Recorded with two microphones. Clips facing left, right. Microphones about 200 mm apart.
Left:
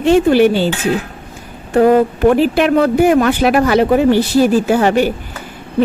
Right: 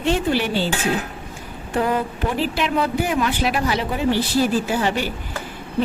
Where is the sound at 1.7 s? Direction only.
55° left (ahead or behind).